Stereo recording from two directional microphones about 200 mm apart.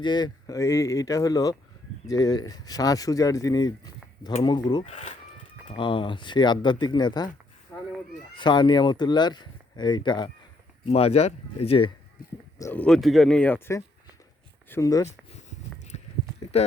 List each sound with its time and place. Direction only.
0.0 s speech: 20° left (ahead or behind)
4.9 s speech: 35° left (ahead or behind)
7.7 s cat: 10° left (ahead or behind)
8.4 s speech: 25° left (ahead or behind)
12.5 s speech: 10° left (ahead or behind)
15.4 s a sound: 35° left (ahead or behind)